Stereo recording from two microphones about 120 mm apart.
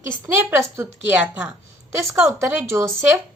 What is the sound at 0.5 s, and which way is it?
Speech, 20° right (ahead or behind).